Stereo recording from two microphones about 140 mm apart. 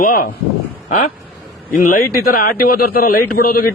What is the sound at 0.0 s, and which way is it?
Speech, 90° left.